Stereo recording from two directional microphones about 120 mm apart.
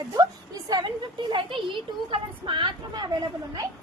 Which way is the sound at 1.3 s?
45° right (ahead or behind).